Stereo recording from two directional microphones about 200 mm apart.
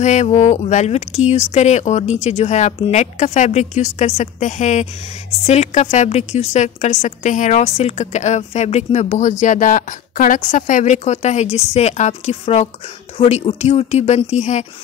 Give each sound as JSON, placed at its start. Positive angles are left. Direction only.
{"t": 0.0, "sound": "a woman's voice", "side_deg": 35}